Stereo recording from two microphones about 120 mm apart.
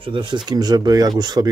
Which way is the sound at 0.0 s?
45° right (ahead or behind).